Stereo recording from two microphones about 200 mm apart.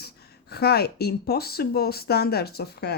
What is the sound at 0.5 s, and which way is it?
Speech, 55° left (ahead or behind).